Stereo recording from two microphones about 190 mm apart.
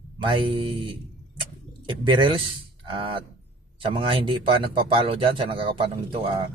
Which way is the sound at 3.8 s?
25° right (ahead or behind).